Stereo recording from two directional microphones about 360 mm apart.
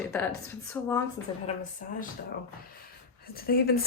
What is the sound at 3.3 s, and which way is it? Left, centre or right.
Speech, left.